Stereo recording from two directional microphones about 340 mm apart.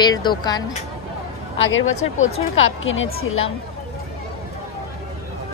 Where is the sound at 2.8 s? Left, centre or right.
Left.